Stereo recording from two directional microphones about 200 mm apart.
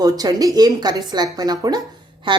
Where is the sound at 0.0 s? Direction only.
20° right (ahead or behind).